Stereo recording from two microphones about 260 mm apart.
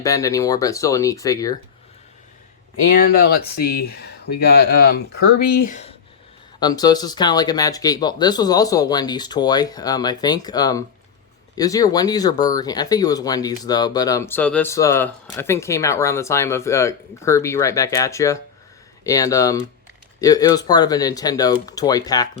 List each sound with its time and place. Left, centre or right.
0.0 s speech: centre
3.0 s speech: left
6.6 s speech: centre